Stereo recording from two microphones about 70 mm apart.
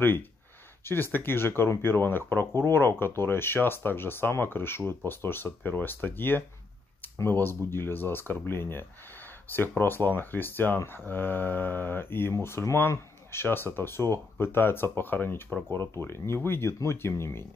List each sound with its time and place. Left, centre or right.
0.0 s speech: left